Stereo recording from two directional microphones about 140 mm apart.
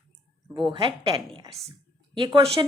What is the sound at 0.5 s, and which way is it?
A woman's voice, 35° right (ahead or behind).